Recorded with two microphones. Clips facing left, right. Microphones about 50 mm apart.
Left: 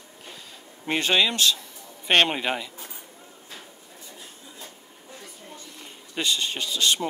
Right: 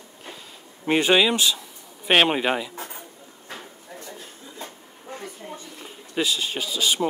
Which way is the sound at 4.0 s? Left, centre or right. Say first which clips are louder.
Right 4 dB; right.